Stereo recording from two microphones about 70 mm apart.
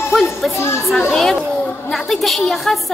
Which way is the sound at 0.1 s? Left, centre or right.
Centre.